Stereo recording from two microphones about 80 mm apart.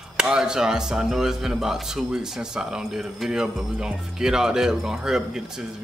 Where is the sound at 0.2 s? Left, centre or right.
Centre.